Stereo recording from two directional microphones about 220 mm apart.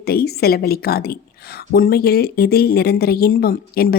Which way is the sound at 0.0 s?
45° left (ahead or behind).